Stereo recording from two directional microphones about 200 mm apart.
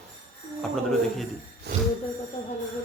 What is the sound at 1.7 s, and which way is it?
Jingle bell, 50° right (ahead or behind).